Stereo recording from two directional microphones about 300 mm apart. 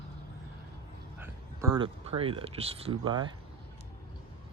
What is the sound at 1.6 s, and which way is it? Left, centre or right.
Speech, centre.